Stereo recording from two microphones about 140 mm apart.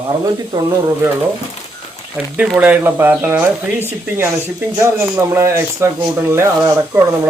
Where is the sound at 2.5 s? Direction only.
10° right (ahead or behind).